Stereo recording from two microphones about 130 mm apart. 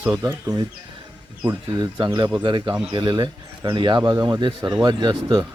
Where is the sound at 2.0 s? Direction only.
30° right (ahead or behind).